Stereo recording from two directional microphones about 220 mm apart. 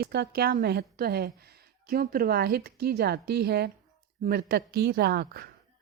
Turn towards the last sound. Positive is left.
turn(degrees=-45)  # may be behind; listen again after turning